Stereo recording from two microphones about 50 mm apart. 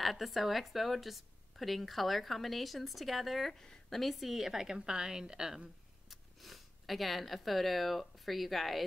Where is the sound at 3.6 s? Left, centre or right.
Centre.